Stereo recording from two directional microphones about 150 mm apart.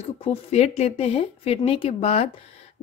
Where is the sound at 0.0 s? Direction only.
45° left (ahead or behind).